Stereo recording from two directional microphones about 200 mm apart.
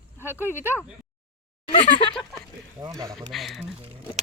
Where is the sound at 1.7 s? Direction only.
25° left (ahead or behind).